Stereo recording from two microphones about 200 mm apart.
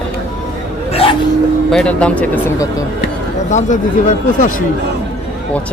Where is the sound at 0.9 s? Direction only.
25° left (ahead or behind).